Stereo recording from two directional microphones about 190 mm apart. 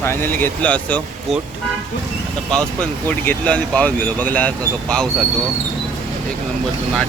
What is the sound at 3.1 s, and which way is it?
Speech, 10° left (ahead or behind).